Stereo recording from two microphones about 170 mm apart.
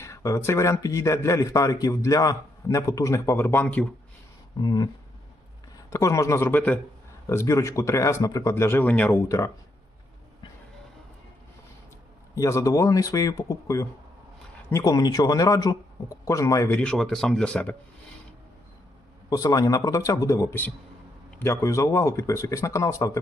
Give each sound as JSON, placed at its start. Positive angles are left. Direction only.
{"t": 0.0, "sound": "speech", "side_deg": 20}
{"t": 4.6, "sound": "speech", "side_deg": 20}
{"t": 12.3, "sound": "speech", "side_deg": 20}
{"t": 16.8, "sound": "speech", "side_deg": 5}
{"t": 19.3, "sound": "speech", "side_deg": 20}